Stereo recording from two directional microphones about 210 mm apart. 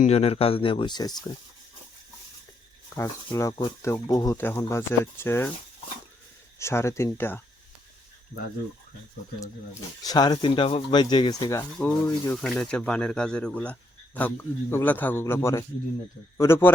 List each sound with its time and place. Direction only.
0.0 s speech: 30° left (ahead or behind)
2.9 s speech: 10° left (ahead or behind)
6.6 s speech: 15° left (ahead or behind)
10.0 s speech: 20° left (ahead or behind)